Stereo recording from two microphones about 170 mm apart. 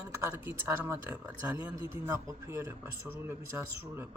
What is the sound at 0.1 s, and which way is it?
A man's voice, 15° right (ahead or behind).